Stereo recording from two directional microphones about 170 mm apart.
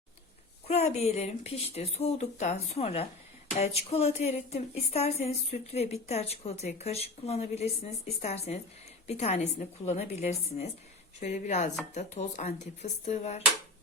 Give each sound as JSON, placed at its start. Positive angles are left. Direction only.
{"t": 0.7, "sound": "speech", "side_deg": 40}